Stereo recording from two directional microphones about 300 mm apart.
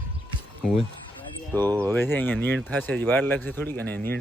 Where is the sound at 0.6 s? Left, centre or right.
Centre.